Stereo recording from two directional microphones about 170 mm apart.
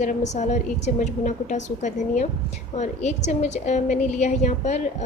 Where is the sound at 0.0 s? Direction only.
45° left (ahead or behind).